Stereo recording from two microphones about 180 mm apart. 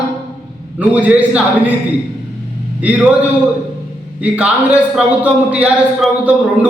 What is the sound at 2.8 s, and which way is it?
Speech, 10° right (ahead or behind).